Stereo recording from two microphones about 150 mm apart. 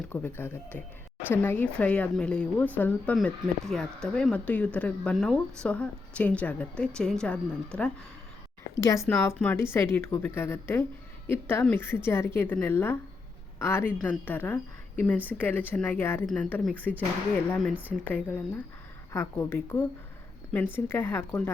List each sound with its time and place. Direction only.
0.1 s speech: 15° left (ahead or behind)
8.7 s speech: 20° left (ahead or behind)